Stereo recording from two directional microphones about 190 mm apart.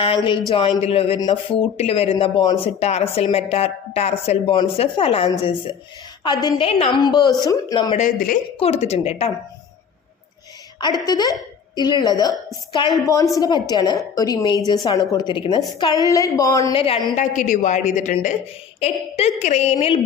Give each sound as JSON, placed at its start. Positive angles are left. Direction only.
{"t": 0.0, "sound": "a woman's voice", "side_deg": 30}
{"t": 7.9, "sound": "speech", "side_deg": 45}
{"t": 8.5, "sound": "speech", "side_deg": 30}
{"t": 10.8, "sound": "a woman's voice", "side_deg": 20}
{"t": 16.7, "sound": "a woman's voice", "side_deg": 30}
{"t": 17.2, "sound": "speech", "side_deg": 40}